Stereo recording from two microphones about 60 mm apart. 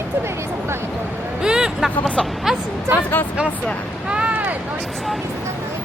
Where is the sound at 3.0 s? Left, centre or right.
Left.